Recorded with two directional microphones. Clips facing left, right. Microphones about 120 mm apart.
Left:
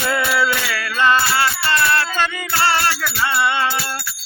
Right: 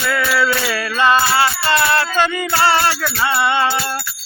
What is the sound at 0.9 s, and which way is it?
Music, 15° right (ahead or behind).